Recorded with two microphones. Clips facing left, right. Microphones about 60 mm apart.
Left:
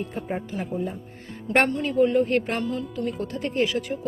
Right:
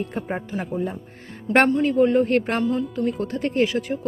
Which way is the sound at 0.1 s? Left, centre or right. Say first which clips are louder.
Right 2 dB; right.